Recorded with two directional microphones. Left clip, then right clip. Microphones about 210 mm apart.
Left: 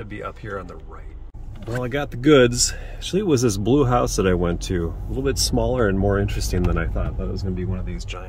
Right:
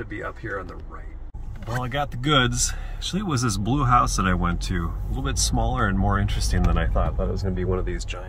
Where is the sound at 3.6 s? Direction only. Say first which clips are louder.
Right 3 dB; 35° right (ahead or behind).